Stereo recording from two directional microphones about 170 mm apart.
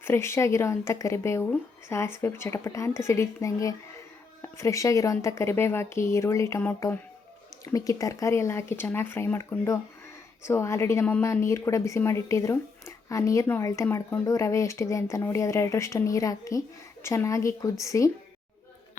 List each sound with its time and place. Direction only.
0.0 s a woman's voice: 15° left (ahead or behind)